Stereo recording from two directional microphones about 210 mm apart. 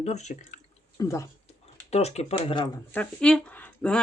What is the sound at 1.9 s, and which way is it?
Speech, 30° left (ahead or behind).